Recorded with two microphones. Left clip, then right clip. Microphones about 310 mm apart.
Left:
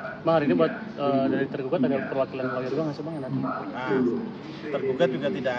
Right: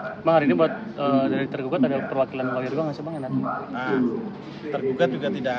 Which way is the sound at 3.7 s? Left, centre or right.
Centre.